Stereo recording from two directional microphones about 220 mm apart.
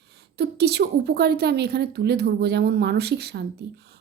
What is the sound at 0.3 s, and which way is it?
Speech, 50° right (ahead or behind).